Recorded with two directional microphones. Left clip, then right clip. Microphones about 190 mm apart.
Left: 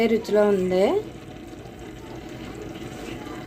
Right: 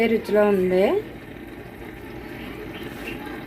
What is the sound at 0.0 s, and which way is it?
Speech, 5° left (ahead or behind).